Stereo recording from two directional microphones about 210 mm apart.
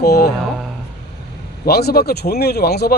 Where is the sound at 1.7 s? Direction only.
50° left (ahead or behind).